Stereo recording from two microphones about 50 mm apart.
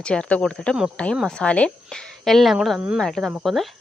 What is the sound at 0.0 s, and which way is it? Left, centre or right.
Speech, centre.